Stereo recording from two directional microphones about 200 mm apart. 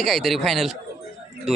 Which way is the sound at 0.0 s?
Centre (ahead or behind).